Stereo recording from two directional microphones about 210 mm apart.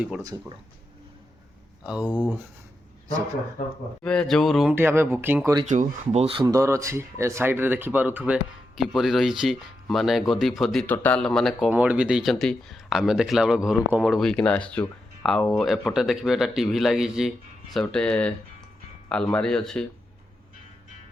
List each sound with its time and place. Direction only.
0.2 s speech: 15° right (ahead or behind)
1.9 s speech: 5° right (ahead or behind)
4.0 s speech: 5° left (ahead or behind)
4.7 s speech: 10° right (ahead or behind)
5.6 s speech: 30° right (ahead or behind)
6.4 s speech: 15° right (ahead or behind); by 19.8 s 5° left (ahead or behind)